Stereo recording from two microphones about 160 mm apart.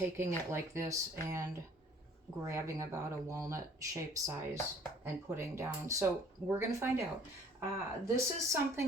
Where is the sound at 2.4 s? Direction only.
20° right (ahead or behind).